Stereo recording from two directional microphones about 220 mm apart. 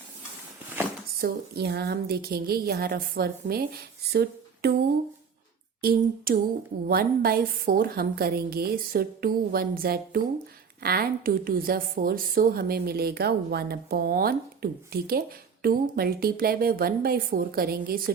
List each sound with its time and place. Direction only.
1.2 s a woman's voice: 45° right (ahead or behind)
4.1 s a sound: 45° right (ahead or behind)
5.8 s a woman's voice: 40° right (ahead or behind)